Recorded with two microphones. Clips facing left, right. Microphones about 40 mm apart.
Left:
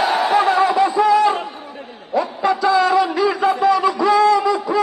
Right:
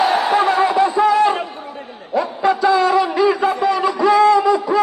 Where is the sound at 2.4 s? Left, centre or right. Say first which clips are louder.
Right 1 dB; right.